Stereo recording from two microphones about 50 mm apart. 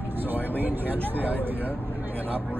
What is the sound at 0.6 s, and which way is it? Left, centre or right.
Speech, right.